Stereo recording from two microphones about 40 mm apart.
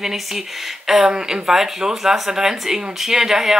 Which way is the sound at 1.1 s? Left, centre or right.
Right.